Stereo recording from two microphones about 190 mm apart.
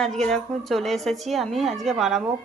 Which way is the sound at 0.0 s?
Centre (ahead or behind).